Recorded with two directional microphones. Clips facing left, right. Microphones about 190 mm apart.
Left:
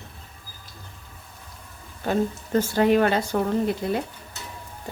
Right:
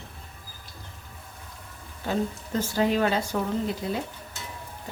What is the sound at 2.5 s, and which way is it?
Speech, 60° left (ahead or behind).